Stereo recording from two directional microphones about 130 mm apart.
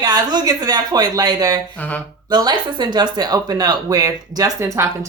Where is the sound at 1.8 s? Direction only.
10° left (ahead or behind).